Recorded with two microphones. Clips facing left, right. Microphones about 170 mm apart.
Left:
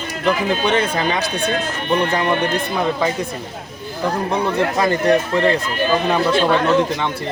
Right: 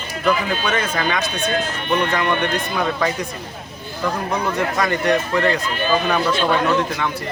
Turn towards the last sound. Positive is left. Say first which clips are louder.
# left 3 dB
turn(degrees=25)  # may be behind; listen again after turning